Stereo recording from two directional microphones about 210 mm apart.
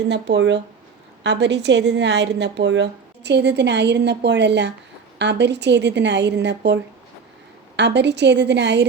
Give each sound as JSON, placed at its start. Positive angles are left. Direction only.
{"t": 0.1, "sound": "a woman's voice", "side_deg": -55}
{"t": 7.8, "sound": "a woman's voice", "side_deg": -55}